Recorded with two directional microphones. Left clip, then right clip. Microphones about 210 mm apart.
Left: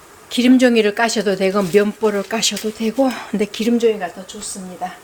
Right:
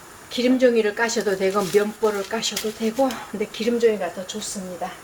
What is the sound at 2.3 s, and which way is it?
Speech, 55° left (ahead or behind).